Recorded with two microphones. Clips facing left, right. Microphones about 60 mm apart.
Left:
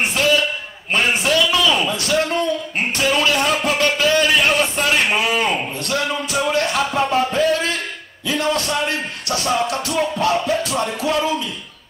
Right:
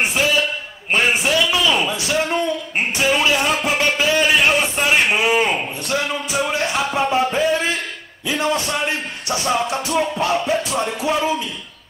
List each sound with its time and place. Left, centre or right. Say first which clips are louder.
0.1 s a sound: left 2 dB; centre
0.9 s a man's voice: even; centre
3.0 s music: even; centre
5.3 s a man's voice: right 1 dB; centre
6.3 s music: left 2 dB; centre
8.3 s a man's voice: even; centre
8.7 s a man's voice: left 1 dB; centre
10.7 s music: even; centre
11.0 s a man's voice: even; centre